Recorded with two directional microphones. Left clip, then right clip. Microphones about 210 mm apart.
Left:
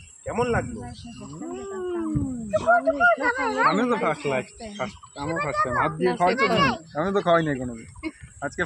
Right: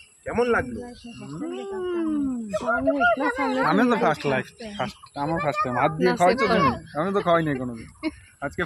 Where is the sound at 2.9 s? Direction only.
45° right (ahead or behind).